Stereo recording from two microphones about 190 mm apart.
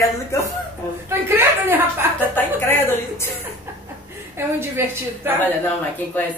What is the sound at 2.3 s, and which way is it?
Speech, 10° left (ahead or behind).